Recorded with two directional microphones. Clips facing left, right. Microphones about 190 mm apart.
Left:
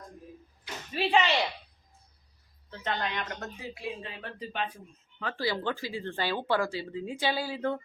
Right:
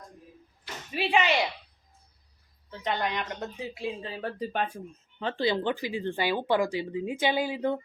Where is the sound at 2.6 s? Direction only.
15° right (ahead or behind).